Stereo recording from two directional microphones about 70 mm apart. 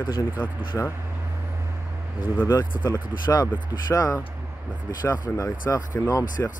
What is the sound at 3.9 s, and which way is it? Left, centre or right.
Speech, left.